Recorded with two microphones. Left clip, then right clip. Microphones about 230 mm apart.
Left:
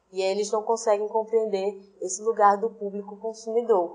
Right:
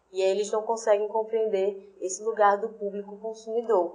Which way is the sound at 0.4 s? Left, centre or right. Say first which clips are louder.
Left 2 dB; left.